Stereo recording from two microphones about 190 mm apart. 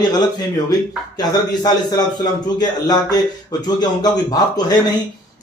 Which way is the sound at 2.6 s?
20° left (ahead or behind).